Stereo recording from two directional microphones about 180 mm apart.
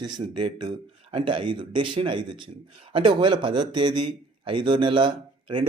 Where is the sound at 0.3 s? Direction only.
25° right (ahead or behind).